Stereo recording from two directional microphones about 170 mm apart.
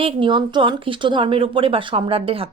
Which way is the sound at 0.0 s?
30° right (ahead or behind).